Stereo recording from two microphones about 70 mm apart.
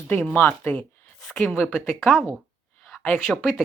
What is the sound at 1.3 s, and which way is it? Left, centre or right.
Speech, centre.